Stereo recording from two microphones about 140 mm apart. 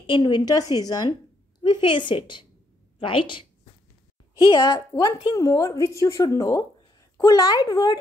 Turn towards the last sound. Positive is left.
turn(degrees=30)  # may be behind; listen again after turning